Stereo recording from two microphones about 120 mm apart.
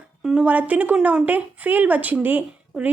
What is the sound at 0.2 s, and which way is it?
A woman's voice, 5° right (ahead or behind).